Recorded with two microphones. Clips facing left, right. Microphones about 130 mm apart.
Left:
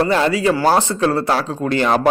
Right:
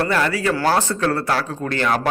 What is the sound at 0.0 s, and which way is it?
Speech, 25° left (ahead or behind).